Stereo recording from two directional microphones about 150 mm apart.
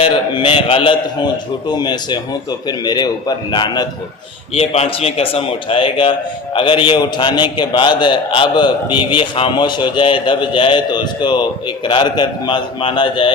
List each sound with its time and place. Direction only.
0.0 s a man's voice: 35° left (ahead or behind)
4.5 s a man's voice: 45° left (ahead or behind)